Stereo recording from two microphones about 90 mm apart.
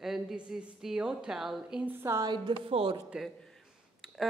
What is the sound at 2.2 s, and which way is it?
Speech, 60° right (ahead or behind).